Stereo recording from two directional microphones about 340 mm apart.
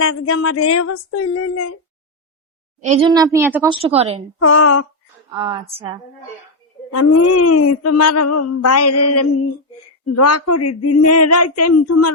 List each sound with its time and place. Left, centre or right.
0.0 s child singing: left
2.8 s a child's voice: centre
3.1 s a woman's voice: centre
4.4 s child singing: left
5.3 s a woman's voice: centre
6.9 s a sound: left